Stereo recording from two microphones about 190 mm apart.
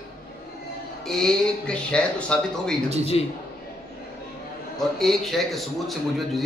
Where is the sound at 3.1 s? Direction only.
30° left (ahead or behind).